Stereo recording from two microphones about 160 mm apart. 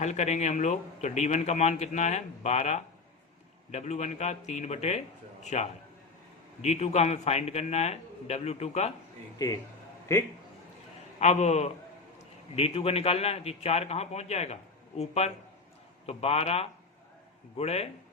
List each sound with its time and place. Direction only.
0.0 s a man's voice: 45° left (ahead or behind)
9.4 s a man's voice: 25° left (ahead or behind)
11.2 s a man's voice: 45° left (ahead or behind)